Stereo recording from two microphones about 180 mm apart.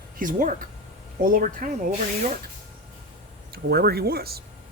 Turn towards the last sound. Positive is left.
turn(degrees=-60)  # may be behind; listen again after turning